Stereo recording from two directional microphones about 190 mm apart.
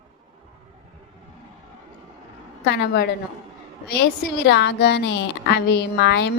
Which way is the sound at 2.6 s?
60° left (ahead or behind).